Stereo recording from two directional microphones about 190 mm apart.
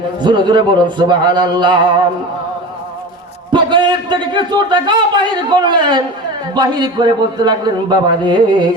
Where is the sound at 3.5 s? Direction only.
25° right (ahead or behind).